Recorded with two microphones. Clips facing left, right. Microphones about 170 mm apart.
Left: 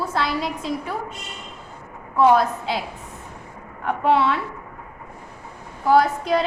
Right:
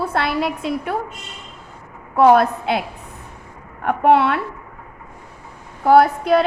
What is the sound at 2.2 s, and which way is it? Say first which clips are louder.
Speech: right 4 dB; 60° right (ahead or behind).